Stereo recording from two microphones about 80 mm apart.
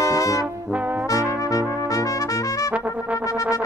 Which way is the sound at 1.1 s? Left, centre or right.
Left.